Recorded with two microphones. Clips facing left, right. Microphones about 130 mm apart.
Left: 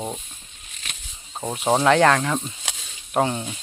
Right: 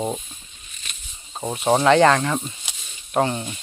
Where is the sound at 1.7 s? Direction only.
Centre (ahead or behind).